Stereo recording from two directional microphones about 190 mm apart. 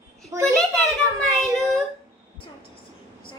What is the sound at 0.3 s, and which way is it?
Speech, 15° right (ahead or behind).